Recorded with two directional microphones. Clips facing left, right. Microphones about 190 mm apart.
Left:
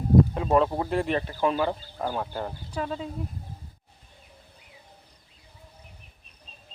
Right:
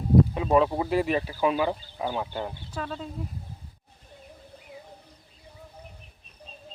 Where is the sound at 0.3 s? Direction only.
Centre (ahead or behind).